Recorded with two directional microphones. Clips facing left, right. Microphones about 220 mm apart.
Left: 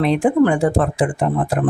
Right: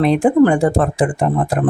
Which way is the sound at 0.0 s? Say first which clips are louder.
Right 3 dB; 45° right (ahead or behind).